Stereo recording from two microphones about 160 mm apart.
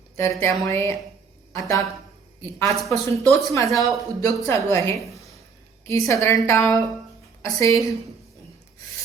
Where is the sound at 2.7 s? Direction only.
Centre (ahead or behind).